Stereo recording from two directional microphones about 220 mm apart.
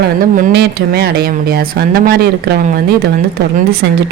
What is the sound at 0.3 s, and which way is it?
Speech, 45° right (ahead or behind).